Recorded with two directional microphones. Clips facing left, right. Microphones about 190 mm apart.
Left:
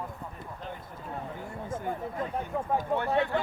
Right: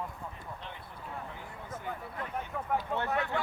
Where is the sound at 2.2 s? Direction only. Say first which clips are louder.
Left 4 dB; 30° left (ahead or behind).